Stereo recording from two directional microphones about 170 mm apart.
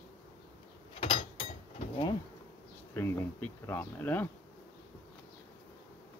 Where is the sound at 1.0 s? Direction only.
30° left (ahead or behind).